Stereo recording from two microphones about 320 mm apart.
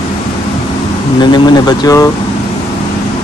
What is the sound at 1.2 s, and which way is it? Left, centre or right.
Speech, centre.